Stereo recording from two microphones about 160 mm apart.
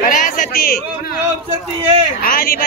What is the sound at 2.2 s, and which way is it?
Speech, 65° left (ahead or behind).